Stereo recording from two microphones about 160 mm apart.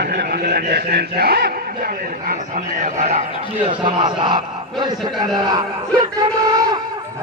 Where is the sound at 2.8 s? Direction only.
50° right (ahead or behind).